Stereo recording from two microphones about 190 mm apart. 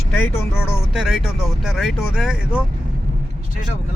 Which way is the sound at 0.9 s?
5° right (ahead or behind).